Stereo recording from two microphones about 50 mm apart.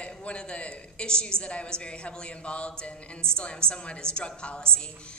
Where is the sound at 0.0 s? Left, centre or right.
Left.